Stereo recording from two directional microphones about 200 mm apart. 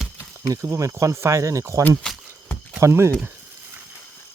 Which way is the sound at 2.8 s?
15° right (ahead or behind).